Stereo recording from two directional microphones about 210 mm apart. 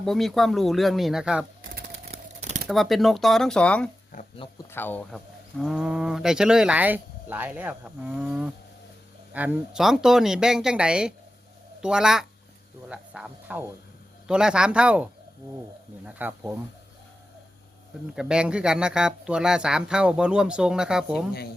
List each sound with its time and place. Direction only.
0.0 s speech: centre (ahead or behind)
1.6 s typewriter: 45° right (ahead or behind)
2.1 s a sound: 30° right (ahead or behind)
2.6 s speech: centre (ahead or behind)
4.1 s speech: 40° left (ahead or behind)
4.7 s speech: 10° left (ahead or behind); by 16.6 s 10° right (ahead or behind)
18.1 s speech: 5° right (ahead or behind)